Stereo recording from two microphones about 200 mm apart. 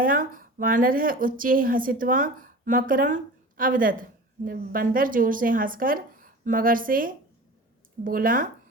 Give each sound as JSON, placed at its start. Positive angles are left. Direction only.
{"t": 0.0, "sound": "a woman's voice", "side_deg": -45}